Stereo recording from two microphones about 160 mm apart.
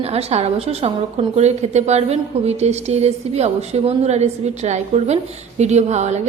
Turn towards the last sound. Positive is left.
turn(degrees=-45)  # may be behind; listen again after turning